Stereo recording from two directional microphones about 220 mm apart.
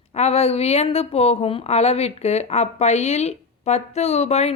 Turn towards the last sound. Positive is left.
turn(degrees=30)  # may be behind; listen again after turning